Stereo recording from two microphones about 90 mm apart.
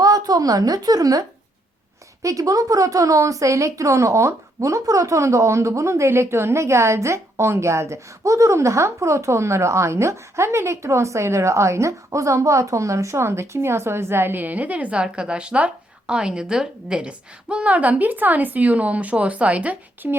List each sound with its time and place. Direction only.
0.0 s a woman's voice: 45° right (ahead or behind)
2.2 s a woman's voice: 40° right (ahead or behind); by 20.1 s 20° right (ahead or behind)